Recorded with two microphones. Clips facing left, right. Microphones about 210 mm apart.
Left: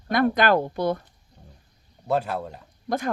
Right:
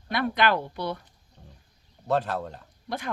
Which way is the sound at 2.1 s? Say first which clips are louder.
Left 1 dB; 10° left (ahead or behind).